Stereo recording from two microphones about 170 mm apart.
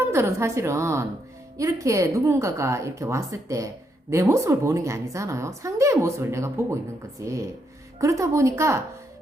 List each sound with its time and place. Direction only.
0.1 s a woman's voice: 15° right (ahead or behind)